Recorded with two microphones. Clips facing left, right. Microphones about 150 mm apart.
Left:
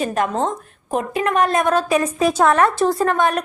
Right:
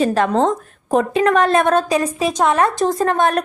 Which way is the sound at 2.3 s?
5° left (ahead or behind).